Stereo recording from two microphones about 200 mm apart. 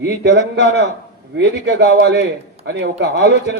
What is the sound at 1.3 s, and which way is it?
Speech, 60° right (ahead or behind).